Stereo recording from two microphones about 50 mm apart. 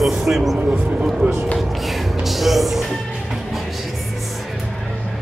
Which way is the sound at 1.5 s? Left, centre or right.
Centre.